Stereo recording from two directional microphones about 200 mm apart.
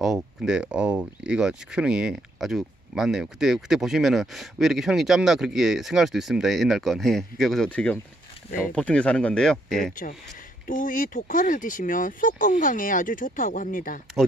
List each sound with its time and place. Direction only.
0.0 s speech: centre (ahead or behind)
10.7 s speech: 40° left (ahead or behind)